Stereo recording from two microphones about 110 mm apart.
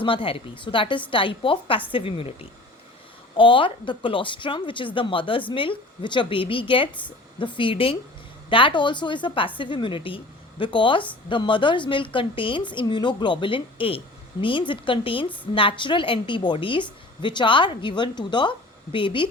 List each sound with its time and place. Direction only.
0.0 s a woman's voice: 50° left (ahead or behind)